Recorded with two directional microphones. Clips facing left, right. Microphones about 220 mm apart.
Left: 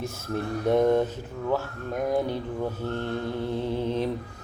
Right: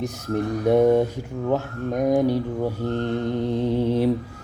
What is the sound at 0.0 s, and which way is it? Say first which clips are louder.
Speech: right 5 dB; 15° right (ahead or behind).